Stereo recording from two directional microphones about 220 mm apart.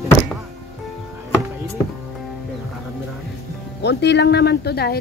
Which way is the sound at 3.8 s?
50° left (ahead or behind).